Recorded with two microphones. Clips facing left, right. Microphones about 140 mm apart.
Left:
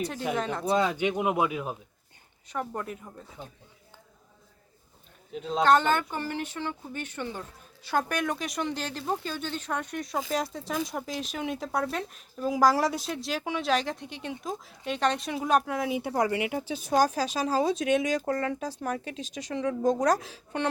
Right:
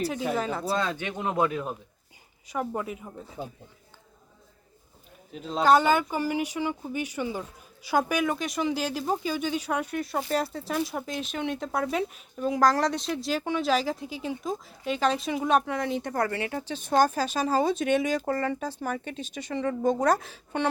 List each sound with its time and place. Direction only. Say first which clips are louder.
0.0 s speech: right 2 dB; centre (ahead or behind)
0.7 s speech: left 4 dB; 15° left (ahead or behind)
2.5 s speech: right 3 dB; 5° right (ahead or behind)
5.3 s speech: right 1 dB; centre (ahead or behind)